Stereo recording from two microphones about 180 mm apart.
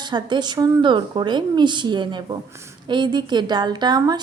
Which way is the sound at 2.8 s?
25° right (ahead or behind).